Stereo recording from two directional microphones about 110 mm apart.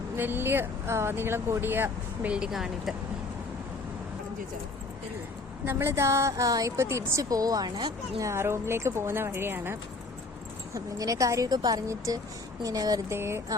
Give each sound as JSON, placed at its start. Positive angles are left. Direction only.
{"t": 0.2, "sound": "a woman's voice", "side_deg": -20}
{"t": 2.3, "sound": "a woman's voice", "side_deg": -5}
{"t": 5.6, "sound": "a woman's voice", "side_deg": -25}
{"t": 8.2, "sound": "a woman's voice", "side_deg": -25}
{"t": 10.8, "sound": "a woman's voice", "side_deg": -30}
{"t": 13.1, "sound": "a woman's voice", "side_deg": -25}